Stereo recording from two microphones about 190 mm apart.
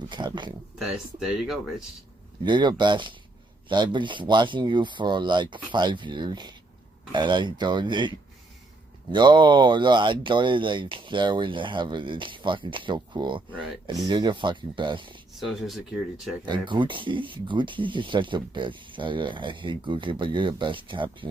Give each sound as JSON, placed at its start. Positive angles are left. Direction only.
{"t": 0.1, "sound": "speech", "side_deg": -25}
{"t": 0.7, "sound": "speech", "side_deg": 0}
{"t": 2.4, "sound": "speech", "side_deg": -25}
{"t": 15.4, "sound": "speech", "side_deg": 0}
{"t": 16.4, "sound": "speech", "side_deg": -25}